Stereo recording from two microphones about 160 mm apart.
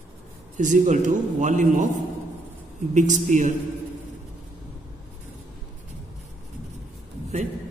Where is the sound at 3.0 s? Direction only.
50° right (ahead or behind).